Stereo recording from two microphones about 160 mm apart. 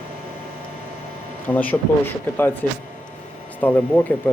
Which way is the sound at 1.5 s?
10° left (ahead or behind).